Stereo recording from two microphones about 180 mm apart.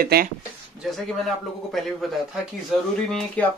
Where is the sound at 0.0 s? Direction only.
55° right (ahead or behind).